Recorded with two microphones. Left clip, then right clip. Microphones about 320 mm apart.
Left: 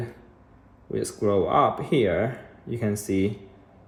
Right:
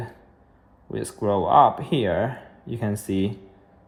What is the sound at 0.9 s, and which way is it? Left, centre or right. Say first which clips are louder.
Speech: even; centre.